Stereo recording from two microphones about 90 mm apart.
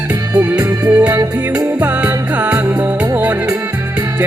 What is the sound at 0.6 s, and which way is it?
Music, 15° right (ahead or behind).